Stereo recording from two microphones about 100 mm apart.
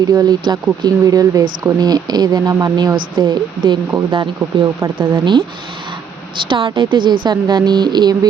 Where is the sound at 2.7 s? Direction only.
50° right (ahead or behind).